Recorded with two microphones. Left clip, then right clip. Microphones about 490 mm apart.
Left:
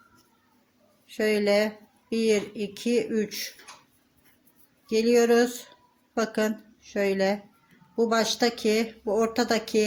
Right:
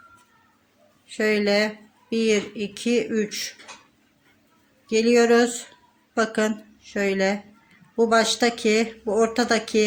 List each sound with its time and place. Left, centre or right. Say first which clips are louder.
1.0 s speech: right 2 dB; left
4.9 s a woman's voice: right 3 dB; left